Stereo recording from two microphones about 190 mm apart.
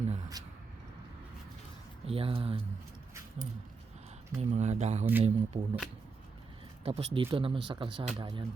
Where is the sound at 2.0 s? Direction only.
30° right (ahead or behind).